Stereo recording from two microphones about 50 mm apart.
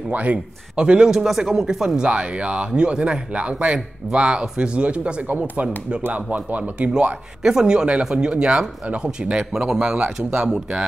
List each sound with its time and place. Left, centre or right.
0.1 s speech: right
0.7 s speech: centre
1.1 s speech: centre; by 6.9 s right
7.4 s speech: centre
9.4 s speech: centre